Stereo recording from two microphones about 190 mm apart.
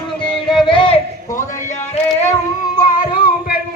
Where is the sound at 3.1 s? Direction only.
50° left (ahead or behind).